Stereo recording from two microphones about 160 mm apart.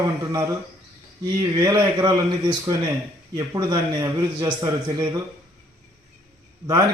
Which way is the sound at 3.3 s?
25° right (ahead or behind).